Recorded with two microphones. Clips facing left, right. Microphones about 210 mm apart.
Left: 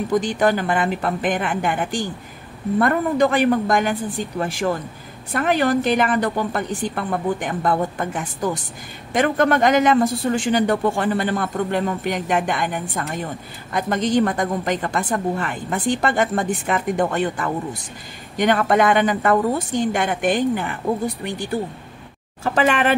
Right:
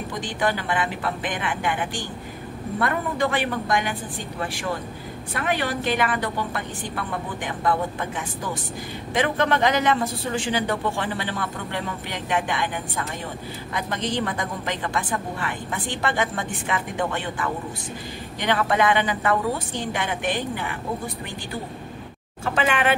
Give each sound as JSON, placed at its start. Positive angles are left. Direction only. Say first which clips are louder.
{"t": 0.4, "sound": "a woman's voice", "louder": "left 5 dB", "side_deg": 45}
{"t": 22.4, "sound": "a woman's voice", "louder": "left 4 dB", "side_deg": 40}